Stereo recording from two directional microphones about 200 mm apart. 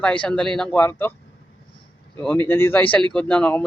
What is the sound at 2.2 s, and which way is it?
A man's voice, 10° left (ahead or behind).